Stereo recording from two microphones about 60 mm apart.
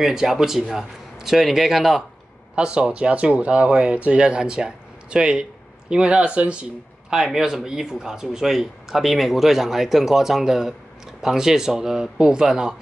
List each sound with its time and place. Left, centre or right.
0.0 s speech: centre
2.5 s speech: centre